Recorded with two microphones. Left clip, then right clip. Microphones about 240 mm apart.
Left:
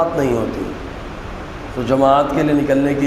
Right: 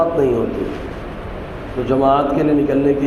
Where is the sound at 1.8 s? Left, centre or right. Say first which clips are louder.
Left 1 dB; left.